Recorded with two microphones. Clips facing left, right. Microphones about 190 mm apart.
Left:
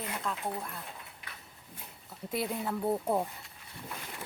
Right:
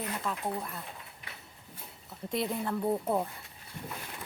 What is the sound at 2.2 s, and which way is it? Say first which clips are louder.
Speech: right 1 dB; 5° left (ahead or behind).